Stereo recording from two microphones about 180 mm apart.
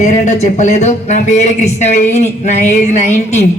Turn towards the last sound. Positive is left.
turn(degrees=40)  # may be behind; listen again after turning